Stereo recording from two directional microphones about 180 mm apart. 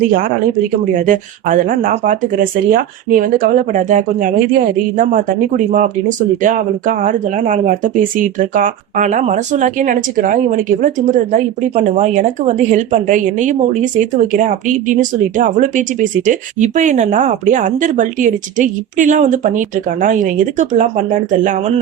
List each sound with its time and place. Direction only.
0.1 s speech: 50° right (ahead or behind)